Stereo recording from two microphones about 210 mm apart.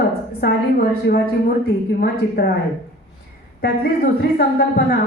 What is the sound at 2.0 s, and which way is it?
Speech, 45° left (ahead or behind).